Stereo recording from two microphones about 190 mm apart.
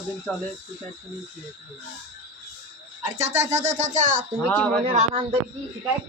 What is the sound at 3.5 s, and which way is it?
Music, 35° right (ahead or behind).